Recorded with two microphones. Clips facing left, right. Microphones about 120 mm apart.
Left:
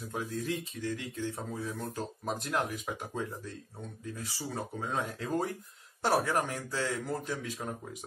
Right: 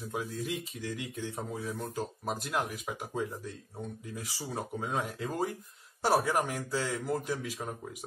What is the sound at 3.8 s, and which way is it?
Speech, 15° right (ahead or behind).